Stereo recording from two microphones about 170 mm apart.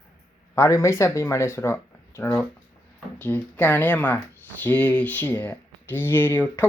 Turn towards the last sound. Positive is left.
turn(degrees=15)  # may be behind; listen again after turning